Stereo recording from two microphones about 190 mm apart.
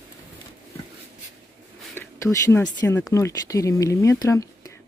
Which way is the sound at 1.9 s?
15° left (ahead or behind).